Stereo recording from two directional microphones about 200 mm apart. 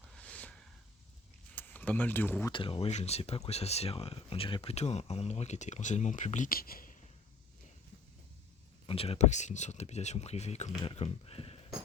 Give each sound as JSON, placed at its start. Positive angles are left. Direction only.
{"t": 0.2, "sound": "a sound", "side_deg": 5}
{"t": 1.5, "sound": "speech", "side_deg": 10}
{"t": 2.5, "sound": "speech", "side_deg": 25}
{"t": 8.9, "sound": "speech", "side_deg": 30}